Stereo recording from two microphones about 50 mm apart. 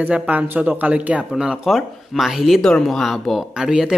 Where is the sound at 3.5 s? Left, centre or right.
Centre.